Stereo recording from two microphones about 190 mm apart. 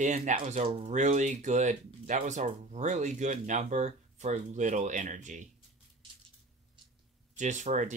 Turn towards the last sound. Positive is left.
turn(degrees=-40)  # may be behind; listen again after turning